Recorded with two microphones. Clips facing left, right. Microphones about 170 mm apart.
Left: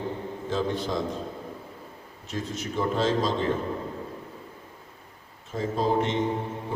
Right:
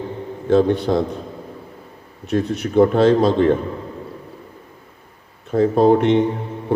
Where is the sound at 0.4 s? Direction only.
65° right (ahead or behind).